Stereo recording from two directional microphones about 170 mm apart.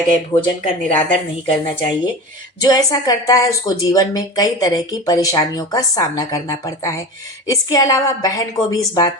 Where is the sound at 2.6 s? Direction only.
20° left (ahead or behind).